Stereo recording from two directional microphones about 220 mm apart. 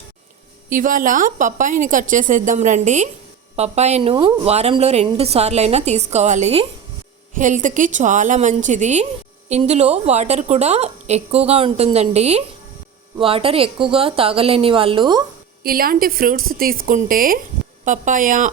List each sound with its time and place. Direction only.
0.7 s a woman's voice: 40° right (ahead or behind); by 15.2 s 20° right (ahead or behind)
15.6 s a woman's voice: 40° right (ahead or behind)